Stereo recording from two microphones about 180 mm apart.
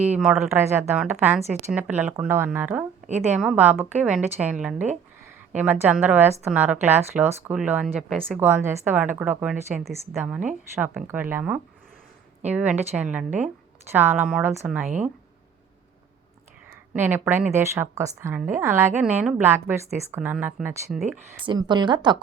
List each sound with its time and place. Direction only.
0.0 s a woman's voice: 5° right (ahead or behind)
16.9 s a woman's voice: 10° right (ahead or behind)
21.4 s a woman's voice: 25° right (ahead or behind)